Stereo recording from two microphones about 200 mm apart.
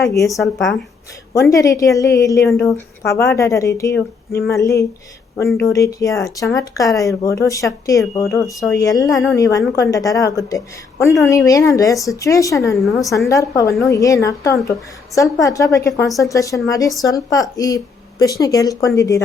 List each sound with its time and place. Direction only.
0.1 s speech: 15° left (ahead or behind)
0.3 s speech: centre (ahead or behind)
1.3 s speech: 15° left (ahead or behind)